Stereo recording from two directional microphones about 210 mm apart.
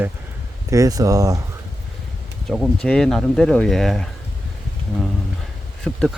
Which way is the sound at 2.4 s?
Centre (ahead or behind).